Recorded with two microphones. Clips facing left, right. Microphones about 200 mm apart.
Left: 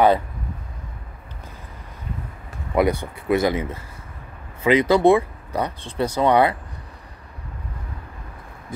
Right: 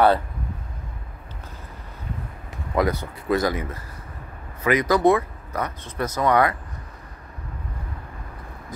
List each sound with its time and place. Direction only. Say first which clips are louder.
2.7 s speech: left 3 dB; 15° left (ahead or behind)